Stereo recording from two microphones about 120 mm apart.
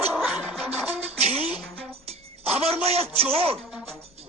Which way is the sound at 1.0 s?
55° right (ahead or behind).